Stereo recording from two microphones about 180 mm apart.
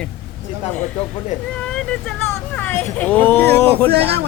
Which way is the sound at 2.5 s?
10° left (ahead or behind).